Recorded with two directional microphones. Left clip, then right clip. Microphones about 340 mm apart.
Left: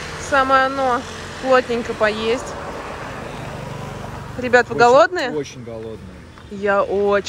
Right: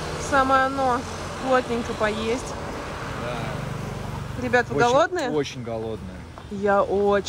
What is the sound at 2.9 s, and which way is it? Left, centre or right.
Vehicle, left.